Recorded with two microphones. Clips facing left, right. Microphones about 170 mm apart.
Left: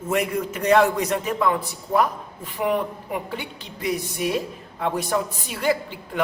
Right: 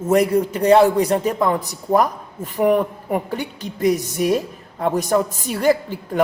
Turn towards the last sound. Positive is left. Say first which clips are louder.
# right 6 dB
turn(degrees=-45)  # may be behind; listen again after turning